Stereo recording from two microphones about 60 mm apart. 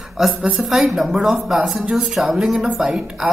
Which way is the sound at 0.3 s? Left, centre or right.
Centre.